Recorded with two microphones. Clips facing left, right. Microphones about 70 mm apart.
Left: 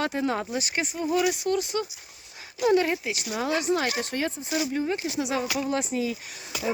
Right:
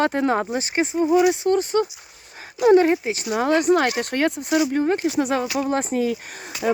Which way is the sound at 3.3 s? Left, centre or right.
Right.